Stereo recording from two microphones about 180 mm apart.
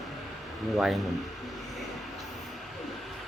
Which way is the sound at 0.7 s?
Centre (ahead or behind).